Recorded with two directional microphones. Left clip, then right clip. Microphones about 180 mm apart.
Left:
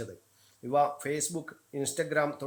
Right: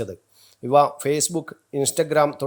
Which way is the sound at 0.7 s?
35° right (ahead or behind).